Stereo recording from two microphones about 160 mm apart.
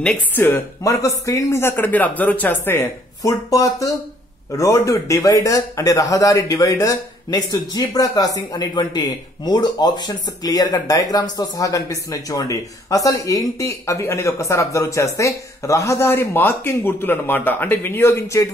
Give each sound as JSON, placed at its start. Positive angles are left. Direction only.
{"t": 0.0, "sound": "speech", "side_deg": 5}
{"t": 0.5, "sound": "speech", "side_deg": 20}